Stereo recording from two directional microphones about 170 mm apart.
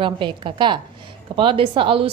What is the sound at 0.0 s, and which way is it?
A woman's voice, 30° right (ahead or behind).